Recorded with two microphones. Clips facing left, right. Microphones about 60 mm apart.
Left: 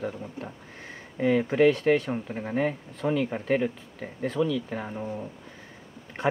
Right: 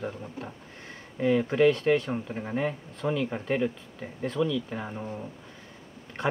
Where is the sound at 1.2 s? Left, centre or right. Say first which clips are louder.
Left 1 dB; left.